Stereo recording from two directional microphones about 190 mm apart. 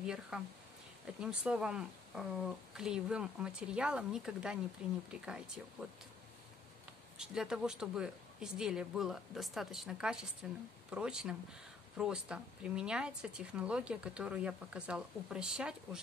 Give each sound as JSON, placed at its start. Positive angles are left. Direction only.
{"t": 0.0, "sound": "speech", "side_deg": -5}
{"t": 7.2, "sound": "speech", "side_deg": -5}